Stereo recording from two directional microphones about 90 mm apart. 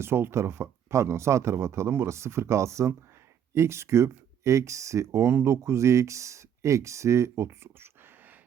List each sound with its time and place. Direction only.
0.0 s speech: 25° right (ahead or behind)